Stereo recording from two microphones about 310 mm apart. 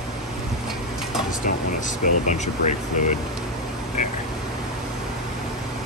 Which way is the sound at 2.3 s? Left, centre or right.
Left.